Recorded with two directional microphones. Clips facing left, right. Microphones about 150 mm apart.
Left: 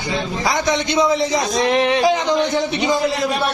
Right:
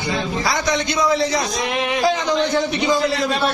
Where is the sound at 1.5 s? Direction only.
35° left (ahead or behind).